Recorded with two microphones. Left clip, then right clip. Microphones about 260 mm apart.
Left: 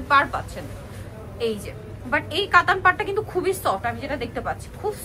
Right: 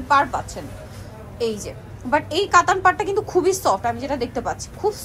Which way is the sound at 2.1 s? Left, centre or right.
Centre.